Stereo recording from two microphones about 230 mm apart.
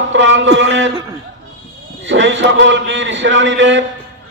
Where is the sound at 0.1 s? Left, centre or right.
Right.